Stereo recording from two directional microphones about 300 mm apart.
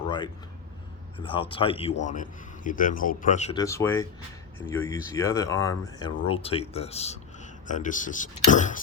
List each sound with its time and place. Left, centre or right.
1.2 s speech: centre
3.6 s speech: centre; by 8.8 s left